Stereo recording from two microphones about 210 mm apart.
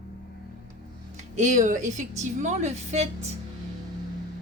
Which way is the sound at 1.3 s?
35° right (ahead or behind).